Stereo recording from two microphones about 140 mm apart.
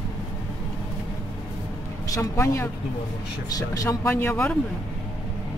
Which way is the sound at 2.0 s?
20° left (ahead or behind).